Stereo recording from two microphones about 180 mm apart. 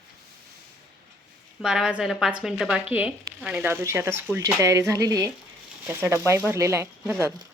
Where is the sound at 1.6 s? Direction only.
5° right (ahead or behind).